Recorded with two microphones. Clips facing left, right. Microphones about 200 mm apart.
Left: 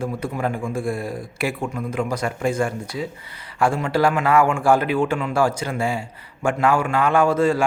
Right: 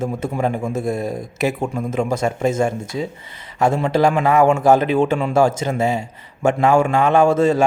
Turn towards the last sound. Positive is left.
turn(degrees=-25)  # may be behind; listen again after turning